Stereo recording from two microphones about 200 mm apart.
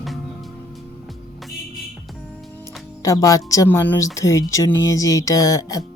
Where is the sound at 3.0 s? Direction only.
15° left (ahead or behind).